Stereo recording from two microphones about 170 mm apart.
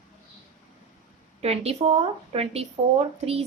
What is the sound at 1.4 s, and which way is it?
A woman's voice, 35° right (ahead or behind).